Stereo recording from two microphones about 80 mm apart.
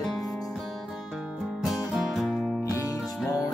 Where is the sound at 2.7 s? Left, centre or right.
Left.